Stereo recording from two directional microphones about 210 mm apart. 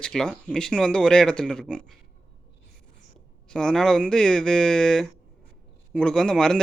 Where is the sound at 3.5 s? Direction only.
5° left (ahead or behind).